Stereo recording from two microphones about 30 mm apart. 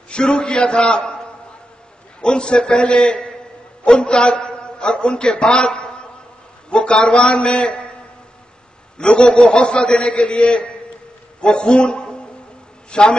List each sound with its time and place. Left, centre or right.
0.1 s a man's voice: left
2.2 s a man's voice: left
8.9 s a man's voice: left